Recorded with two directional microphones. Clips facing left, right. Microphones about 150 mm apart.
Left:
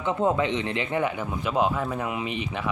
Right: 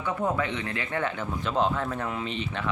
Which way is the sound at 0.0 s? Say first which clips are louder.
Left 4 dB; 20° left (ahead or behind).